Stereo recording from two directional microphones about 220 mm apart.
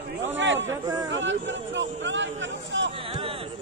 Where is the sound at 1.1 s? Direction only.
55° right (ahead or behind).